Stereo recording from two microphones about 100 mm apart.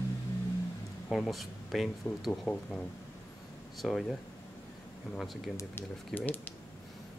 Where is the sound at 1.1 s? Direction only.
Centre (ahead or behind).